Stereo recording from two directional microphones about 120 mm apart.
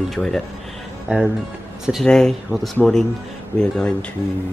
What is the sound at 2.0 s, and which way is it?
A woman's voice, 5° left (ahead or behind).